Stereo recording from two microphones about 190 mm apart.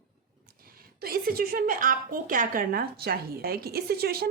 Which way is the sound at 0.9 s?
50° right (ahead or behind).